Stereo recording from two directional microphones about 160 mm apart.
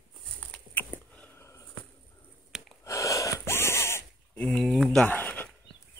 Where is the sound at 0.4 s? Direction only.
10° left (ahead or behind).